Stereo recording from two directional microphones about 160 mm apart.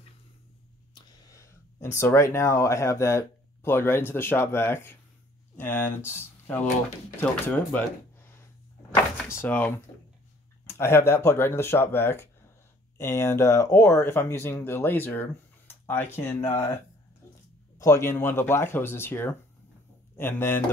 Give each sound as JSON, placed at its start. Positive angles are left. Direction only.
{"t": 0.9, "sound": "speech", "side_deg": 20}
{"t": 8.9, "sound": "speech", "side_deg": 15}
{"t": 17.7, "sound": "speech", "side_deg": 20}